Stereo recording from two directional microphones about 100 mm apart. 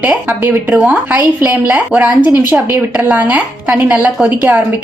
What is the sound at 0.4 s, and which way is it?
A woman's voice, 15° right (ahead or behind).